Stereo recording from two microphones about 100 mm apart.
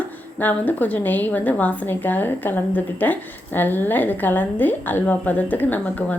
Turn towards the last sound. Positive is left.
turn(degrees=15)  # may be behind; listen again after turning